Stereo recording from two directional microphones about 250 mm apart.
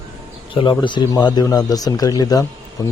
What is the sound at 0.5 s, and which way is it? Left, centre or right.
Speech, centre.